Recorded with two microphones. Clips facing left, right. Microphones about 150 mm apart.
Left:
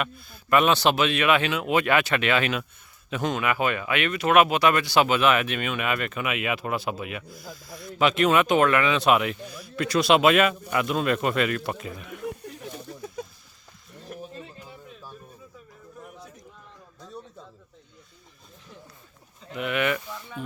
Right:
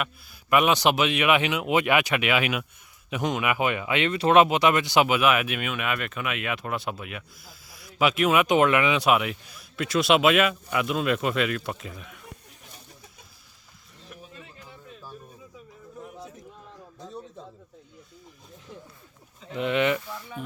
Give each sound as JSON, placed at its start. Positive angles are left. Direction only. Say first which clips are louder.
{"t": 0.0, "sound": "speech", "louder": "left 2 dB", "side_deg": -10}
{"t": 9.0, "sound": "speech", "louder": "left 1 dB", "side_deg": -5}
{"t": 12.5, "sound": "a sound", "louder": "left 13 dB", "side_deg": 90}
{"t": 14.1, "sound": "bird", "louder": "left 8 dB", "side_deg": 45}
{"t": 19.5, "sound": "speech", "louder": "right 2 dB", "side_deg": -25}